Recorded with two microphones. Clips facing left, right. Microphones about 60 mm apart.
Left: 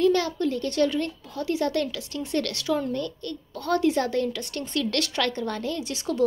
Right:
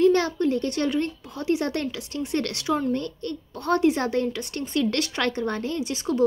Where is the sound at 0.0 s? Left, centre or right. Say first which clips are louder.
Right 2 dB; right.